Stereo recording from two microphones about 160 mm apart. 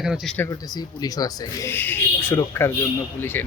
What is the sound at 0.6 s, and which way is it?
Speech, 25° left (ahead or behind).